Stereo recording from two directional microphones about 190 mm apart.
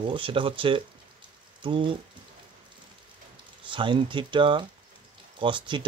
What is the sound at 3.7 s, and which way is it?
Speech, 25° right (ahead or behind).